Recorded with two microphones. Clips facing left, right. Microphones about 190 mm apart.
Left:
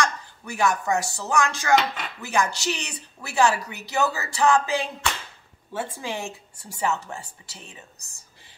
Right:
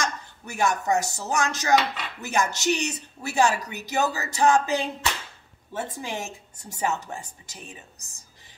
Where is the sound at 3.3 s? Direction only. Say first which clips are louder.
Left 1 dB; 20° right (ahead or behind).